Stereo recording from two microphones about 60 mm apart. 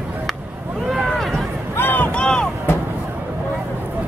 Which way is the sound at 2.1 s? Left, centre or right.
Centre.